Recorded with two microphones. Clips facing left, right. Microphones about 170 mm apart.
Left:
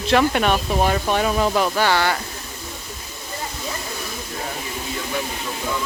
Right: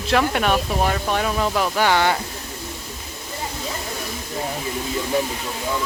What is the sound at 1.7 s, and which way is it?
Speech, 15° right (ahead or behind).